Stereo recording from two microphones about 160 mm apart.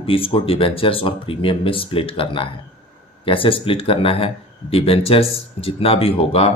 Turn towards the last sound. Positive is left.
turn(degrees=35)  # may be behind; listen again after turning